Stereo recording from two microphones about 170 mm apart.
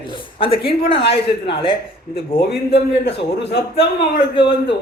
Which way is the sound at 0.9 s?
85° left.